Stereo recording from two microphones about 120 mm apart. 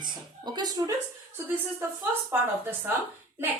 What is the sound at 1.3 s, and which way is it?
A woman's voice, 20° right (ahead or behind).